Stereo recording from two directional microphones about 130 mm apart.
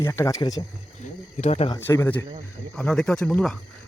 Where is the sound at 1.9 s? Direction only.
20° left (ahead or behind).